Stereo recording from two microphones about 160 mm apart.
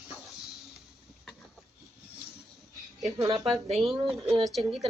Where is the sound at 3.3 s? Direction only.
35° right (ahead or behind).